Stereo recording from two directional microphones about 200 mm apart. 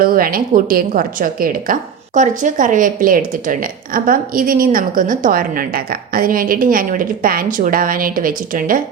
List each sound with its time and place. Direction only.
0.0 s a woman's voice: 45° right (ahead or behind)